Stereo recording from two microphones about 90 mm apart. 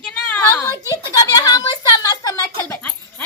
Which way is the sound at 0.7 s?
45° left (ahead or behind).